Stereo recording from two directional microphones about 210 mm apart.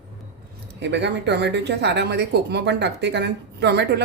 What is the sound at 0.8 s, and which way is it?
Speech, 55° right (ahead or behind).